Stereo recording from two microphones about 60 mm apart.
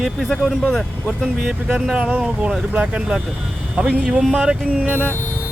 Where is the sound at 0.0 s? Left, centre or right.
Centre.